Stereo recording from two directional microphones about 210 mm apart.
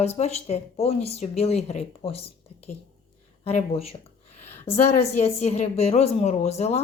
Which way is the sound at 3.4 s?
30° left (ahead or behind).